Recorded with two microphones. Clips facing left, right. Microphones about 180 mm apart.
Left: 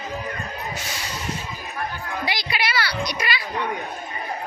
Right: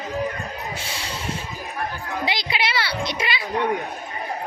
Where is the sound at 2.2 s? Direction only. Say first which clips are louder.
Right 2 dB; 20° right (ahead or behind).